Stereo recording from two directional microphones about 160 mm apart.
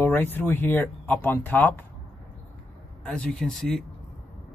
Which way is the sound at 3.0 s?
5° left (ahead or behind).